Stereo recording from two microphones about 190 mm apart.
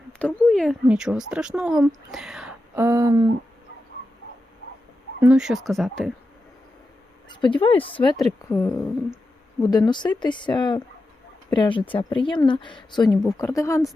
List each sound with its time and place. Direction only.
0.2 s speech: 5° left (ahead or behind)
2.7 s a sound: 15° right (ahead or behind)
5.2 s speech: 5° right (ahead or behind)
7.3 s speech: 25° left (ahead or behind)
8.4 s speech: 15° left (ahead or behind)